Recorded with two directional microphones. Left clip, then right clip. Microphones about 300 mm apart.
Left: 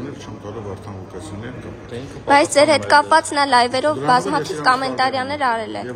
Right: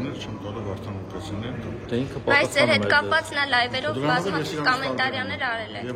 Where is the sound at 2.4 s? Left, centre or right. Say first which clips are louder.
Left 6 dB; left.